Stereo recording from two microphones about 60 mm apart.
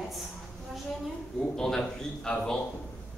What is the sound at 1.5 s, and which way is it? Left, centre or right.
Speech, centre.